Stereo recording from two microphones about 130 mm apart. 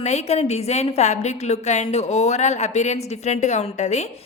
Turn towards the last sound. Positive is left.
turn(degrees=60)  # may be behind; listen again after turning